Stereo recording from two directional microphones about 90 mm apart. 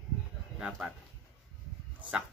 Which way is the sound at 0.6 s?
5° right (ahead or behind).